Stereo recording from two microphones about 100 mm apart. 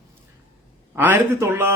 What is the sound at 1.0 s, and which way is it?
Speech, 20° right (ahead or behind).